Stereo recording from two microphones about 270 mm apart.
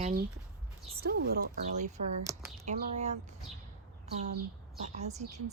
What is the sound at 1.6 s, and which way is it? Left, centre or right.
A woman's voice, right.